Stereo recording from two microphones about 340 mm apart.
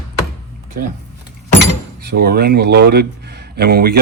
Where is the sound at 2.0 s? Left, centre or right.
Right.